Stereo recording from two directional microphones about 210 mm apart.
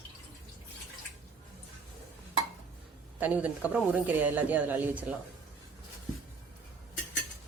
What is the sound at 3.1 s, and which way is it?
Speech, 10° right (ahead or behind).